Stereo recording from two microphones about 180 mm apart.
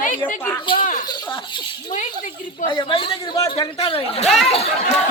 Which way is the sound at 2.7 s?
25° left (ahead or behind).